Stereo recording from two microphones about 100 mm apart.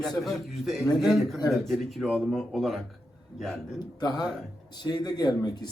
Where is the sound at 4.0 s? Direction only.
40° left (ahead or behind).